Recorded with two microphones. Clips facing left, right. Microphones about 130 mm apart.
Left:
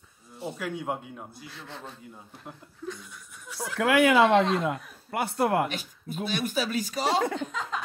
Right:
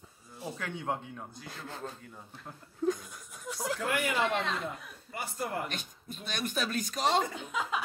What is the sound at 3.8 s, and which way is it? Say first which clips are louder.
Speech: left 12 dB; 90° left.